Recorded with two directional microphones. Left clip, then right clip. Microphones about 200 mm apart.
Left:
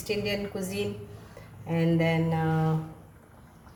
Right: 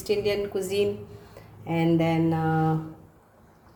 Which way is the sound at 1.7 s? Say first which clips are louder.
Right 3 dB; 40° right (ahead or behind).